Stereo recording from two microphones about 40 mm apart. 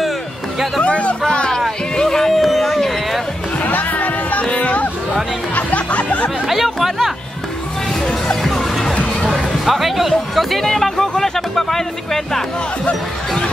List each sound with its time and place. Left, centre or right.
0.8 s speech: left
2.0 s a sound: centre
3.5 s music: left
6.4 s speech: centre
8.5 s music: centre
9.3 s speech: centre